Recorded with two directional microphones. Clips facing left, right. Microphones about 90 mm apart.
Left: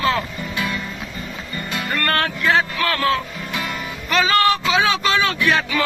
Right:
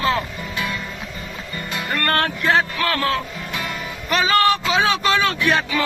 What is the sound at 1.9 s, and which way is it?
Speech, 30° right (ahead or behind).